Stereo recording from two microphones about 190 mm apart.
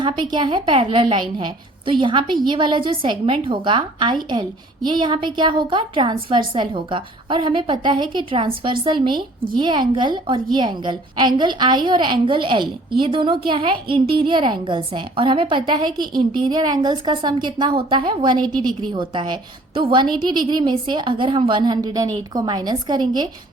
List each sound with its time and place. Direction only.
0.0 s a woman's voice: 25° right (ahead or behind)